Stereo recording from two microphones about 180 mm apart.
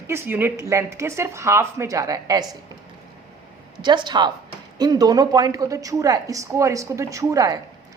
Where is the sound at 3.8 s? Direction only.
25° right (ahead or behind).